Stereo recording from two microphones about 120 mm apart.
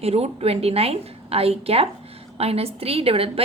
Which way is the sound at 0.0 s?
55° right (ahead or behind).